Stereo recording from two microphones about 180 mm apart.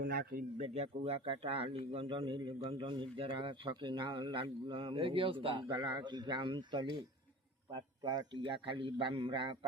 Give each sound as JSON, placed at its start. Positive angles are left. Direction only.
{"t": 0.0, "sound": "speech", "side_deg": -60}
{"t": 0.7, "sound": "a man's voice", "side_deg": -35}